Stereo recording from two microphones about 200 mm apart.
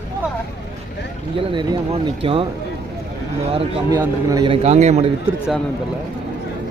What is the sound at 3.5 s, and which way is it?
A man's voice, 20° right (ahead or behind).